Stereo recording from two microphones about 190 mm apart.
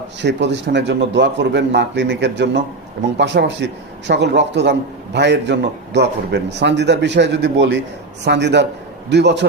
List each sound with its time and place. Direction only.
0.2 s a man's voice: 65° right (ahead or behind)